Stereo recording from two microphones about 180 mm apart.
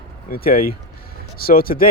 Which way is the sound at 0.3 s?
55° left (ahead or behind).